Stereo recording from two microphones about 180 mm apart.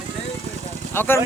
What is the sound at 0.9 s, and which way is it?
Speech, 10° left (ahead or behind).